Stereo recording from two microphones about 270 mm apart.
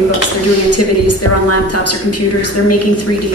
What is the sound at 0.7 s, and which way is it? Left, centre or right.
A woman's voice, left.